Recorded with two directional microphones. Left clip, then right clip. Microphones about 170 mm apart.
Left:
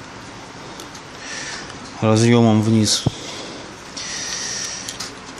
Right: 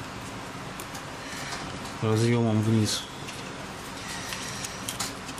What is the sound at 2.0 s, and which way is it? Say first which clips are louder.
Speech: left 11 dB; 55° left (ahead or behind).